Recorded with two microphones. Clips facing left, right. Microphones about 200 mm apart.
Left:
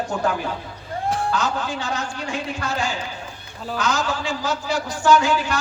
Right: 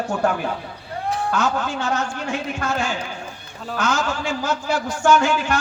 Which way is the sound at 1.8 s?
35° left (ahead or behind).